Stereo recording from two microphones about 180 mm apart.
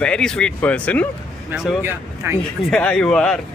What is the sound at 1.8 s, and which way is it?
Speech, 15° right (ahead or behind).